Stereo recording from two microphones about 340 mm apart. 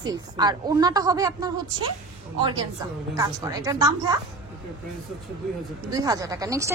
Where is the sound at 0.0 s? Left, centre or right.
Centre.